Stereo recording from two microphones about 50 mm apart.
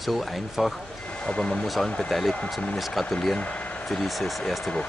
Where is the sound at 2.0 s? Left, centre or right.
Centre.